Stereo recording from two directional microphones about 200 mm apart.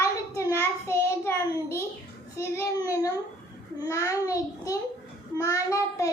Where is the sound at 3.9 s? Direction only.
15° left (ahead or behind).